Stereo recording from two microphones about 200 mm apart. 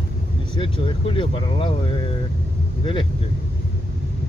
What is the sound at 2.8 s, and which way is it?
Speech, 25° left (ahead or behind).